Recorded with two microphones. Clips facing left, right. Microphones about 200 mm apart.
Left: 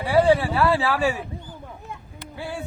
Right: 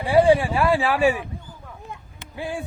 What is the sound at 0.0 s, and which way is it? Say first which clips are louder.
Speech: right 2 dB; 15° right (ahead or behind).